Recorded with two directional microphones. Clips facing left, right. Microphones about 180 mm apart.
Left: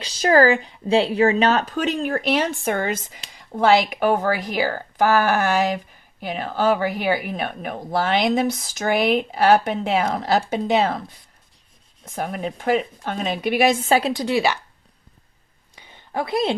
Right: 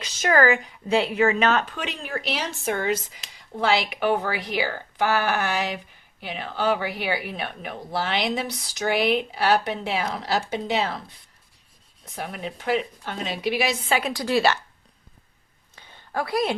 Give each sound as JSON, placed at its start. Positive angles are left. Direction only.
{"t": 0.0, "sound": "a woman's voice", "side_deg": 35}
{"t": 12.0, "sound": "a woman's voice", "side_deg": 45}
{"t": 14.2, "sound": "speech", "side_deg": 15}
{"t": 15.7, "sound": "a sound", "side_deg": 20}